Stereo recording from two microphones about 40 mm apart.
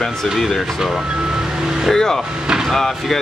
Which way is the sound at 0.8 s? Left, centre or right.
Centre.